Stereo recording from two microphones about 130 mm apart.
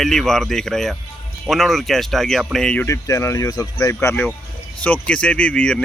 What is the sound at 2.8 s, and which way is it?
Speech, 25° left (ahead or behind).